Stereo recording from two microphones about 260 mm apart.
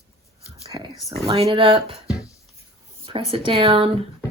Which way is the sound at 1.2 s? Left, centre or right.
Right.